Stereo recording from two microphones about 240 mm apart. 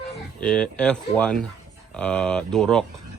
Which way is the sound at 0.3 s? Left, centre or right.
Centre.